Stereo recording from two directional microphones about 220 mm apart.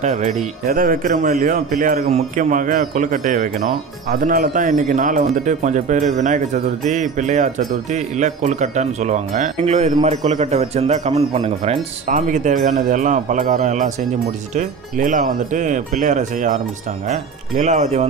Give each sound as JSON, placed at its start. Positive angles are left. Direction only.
{"t": 0.0, "sound": "speech", "side_deg": -30}